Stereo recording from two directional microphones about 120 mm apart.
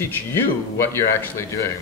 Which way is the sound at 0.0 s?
20° left (ahead or behind).